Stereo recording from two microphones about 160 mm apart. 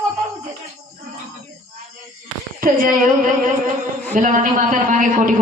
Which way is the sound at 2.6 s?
55° right (ahead or behind).